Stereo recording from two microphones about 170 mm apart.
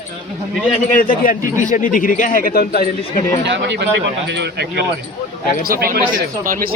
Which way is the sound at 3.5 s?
90° right.